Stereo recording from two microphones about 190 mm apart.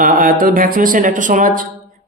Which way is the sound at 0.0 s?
45° right (ahead or behind).